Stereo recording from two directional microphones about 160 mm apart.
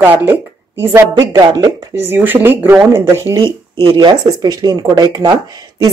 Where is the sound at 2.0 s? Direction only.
10° right (ahead or behind).